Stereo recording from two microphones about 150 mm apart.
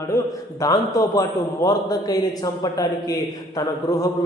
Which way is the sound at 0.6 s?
25° left (ahead or behind).